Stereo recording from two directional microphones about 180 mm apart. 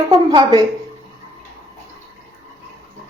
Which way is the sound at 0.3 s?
25° right (ahead or behind).